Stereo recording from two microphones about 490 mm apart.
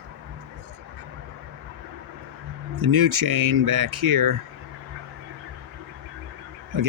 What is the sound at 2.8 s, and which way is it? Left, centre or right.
Speech, right.